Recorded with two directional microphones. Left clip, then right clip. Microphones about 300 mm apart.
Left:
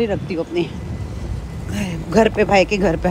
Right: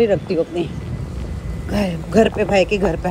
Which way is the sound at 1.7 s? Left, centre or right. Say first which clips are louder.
Right 4 dB; centre.